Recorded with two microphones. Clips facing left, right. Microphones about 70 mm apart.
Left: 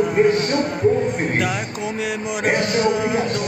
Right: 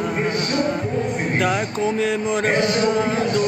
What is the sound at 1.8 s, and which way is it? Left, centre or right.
Music, centre.